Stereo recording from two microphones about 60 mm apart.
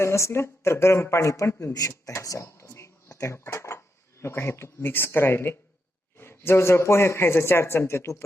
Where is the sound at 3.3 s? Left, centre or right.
Left.